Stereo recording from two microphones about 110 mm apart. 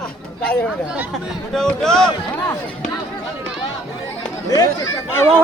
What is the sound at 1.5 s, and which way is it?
Speech, 5° left (ahead or behind).